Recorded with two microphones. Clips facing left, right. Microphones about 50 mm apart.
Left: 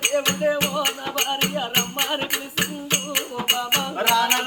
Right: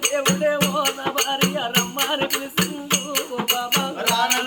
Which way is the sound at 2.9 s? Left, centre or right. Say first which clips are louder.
Right 3 dB; centre.